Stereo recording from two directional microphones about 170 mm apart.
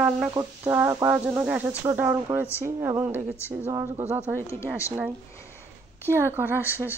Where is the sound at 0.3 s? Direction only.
15° right (ahead or behind).